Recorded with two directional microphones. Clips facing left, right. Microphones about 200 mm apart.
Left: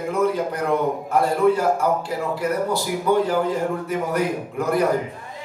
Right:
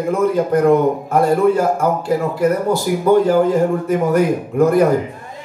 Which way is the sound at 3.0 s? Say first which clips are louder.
Right 7 dB; 45° right (ahead or behind).